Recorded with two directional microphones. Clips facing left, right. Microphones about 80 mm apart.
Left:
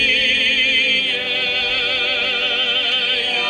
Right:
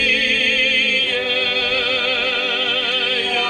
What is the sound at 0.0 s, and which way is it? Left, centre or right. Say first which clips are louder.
Music: right 1 dB; right.